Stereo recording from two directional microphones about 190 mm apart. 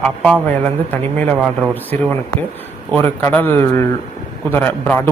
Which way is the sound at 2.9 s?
10° left (ahead or behind).